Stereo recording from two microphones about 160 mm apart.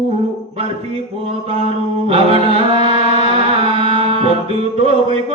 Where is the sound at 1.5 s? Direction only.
40° right (ahead or behind).